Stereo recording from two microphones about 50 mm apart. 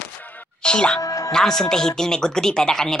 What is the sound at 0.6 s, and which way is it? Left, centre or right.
Speech, centre.